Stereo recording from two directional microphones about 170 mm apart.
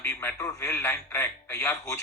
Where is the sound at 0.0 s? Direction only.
15° left (ahead or behind).